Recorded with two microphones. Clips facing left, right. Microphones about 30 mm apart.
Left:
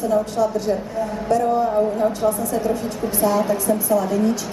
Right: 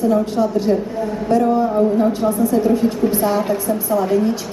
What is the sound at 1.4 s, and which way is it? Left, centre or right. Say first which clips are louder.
A woman's voice: right 2 dB; centre.